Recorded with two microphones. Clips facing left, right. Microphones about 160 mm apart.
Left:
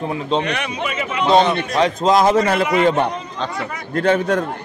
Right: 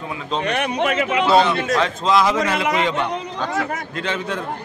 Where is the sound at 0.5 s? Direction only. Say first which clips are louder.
Right 2 dB; 50° right (ahead or behind).